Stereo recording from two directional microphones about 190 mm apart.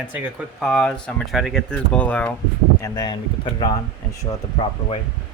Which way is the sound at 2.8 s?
20° left (ahead or behind).